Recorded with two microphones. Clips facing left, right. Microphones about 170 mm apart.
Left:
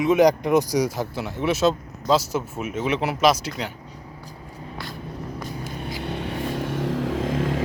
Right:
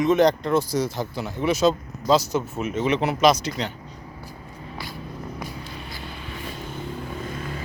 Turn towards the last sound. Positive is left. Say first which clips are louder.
# left 8 dB
turn(degrees=90)